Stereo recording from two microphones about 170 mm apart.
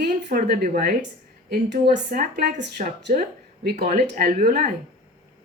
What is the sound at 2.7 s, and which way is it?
Speech, 75° right (ahead or behind).